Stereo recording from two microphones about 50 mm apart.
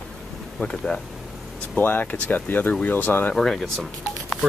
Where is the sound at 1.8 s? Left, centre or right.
Left.